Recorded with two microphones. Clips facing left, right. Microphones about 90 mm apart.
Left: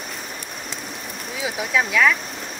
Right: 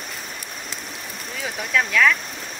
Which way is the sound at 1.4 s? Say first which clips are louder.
Left 1 dB; 10° left (ahead or behind).